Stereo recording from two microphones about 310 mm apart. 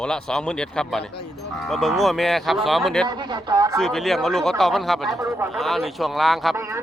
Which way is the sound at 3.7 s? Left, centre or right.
Centre.